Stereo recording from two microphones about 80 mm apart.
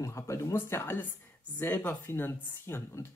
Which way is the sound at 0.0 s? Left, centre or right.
Left.